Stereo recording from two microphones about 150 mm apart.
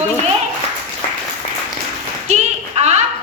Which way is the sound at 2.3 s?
50° right (ahead or behind).